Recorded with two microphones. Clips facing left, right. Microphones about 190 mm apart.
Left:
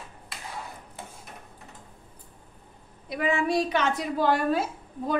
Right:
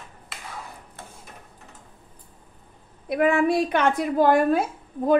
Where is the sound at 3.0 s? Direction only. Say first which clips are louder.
Right 6 dB; 55° right (ahead or behind).